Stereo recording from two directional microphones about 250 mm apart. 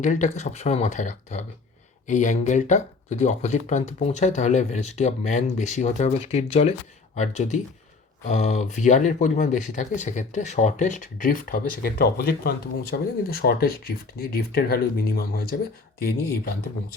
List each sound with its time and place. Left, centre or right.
0.0 s speech: left